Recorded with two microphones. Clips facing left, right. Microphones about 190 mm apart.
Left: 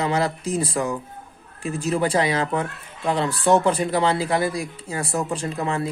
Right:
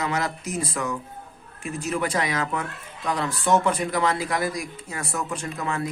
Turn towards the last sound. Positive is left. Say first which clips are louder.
# left 4 dB
turn(degrees=30)  # may be behind; listen again after turning